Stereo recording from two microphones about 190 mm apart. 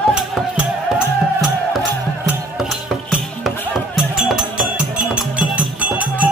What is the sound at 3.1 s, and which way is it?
Music, centre (ahead or behind).